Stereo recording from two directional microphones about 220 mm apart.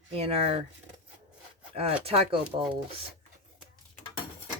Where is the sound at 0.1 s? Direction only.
25° right (ahead or behind).